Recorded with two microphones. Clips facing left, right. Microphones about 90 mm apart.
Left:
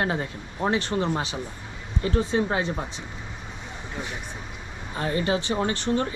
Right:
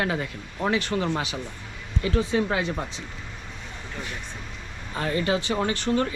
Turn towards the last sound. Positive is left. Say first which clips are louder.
# right 1 dB
turn(degrees=25)  # may be behind; listen again after turning